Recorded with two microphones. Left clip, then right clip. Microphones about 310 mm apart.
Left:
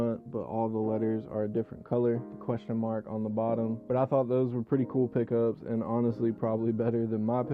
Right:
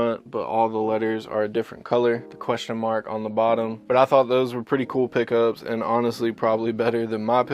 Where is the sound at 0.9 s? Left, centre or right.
Centre.